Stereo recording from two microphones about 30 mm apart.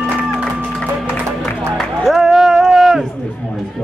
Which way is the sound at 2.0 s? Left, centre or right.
Centre.